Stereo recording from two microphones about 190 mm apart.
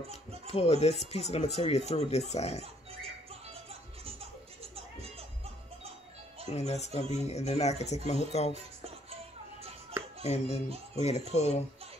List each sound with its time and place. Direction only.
0.5 s speech: 35° left (ahead or behind)
2.6 s music: 30° right (ahead or behind)
6.5 s speech: 35° left (ahead or behind)
8.8 s music: 30° right (ahead or behind)
10.2 s speech: 35° left (ahead or behind)